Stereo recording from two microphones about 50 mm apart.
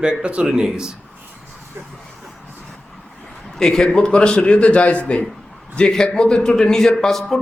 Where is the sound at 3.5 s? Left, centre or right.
Centre; by 5.2 s left.